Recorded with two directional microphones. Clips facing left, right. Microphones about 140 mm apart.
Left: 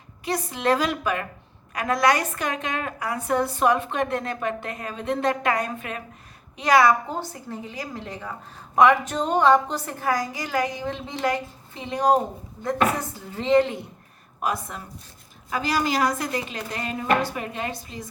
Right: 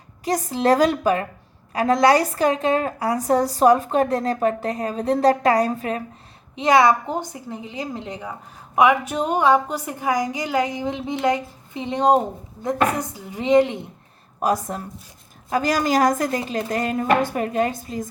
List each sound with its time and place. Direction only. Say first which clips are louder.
0.3 s a woman's voice: right 4 dB; 40° right (ahead or behind)
6.6 s a woman's voice: right 2 dB; 25° right (ahead or behind)
14.4 s a woman's voice: right 6 dB; 40° right (ahead or behind)